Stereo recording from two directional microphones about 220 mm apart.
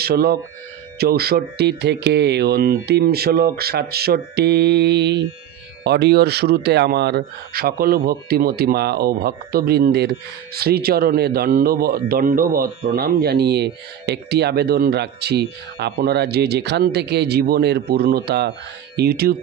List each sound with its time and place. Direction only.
0.0 s a man's voice: 45° right (ahead or behind)